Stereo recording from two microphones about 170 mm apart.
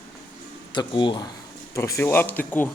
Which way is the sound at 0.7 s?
25° left (ahead or behind).